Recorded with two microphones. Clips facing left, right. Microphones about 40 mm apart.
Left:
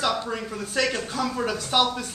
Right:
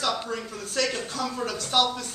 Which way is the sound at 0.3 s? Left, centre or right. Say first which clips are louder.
Left 3 dB; centre.